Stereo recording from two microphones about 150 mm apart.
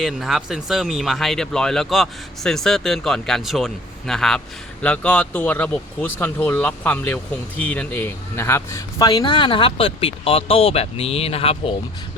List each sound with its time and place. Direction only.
0.0 s speech: centre (ahead or behind); by 9.1 s 20° left (ahead or behind)
9.1 s speech: 35° left (ahead or behind)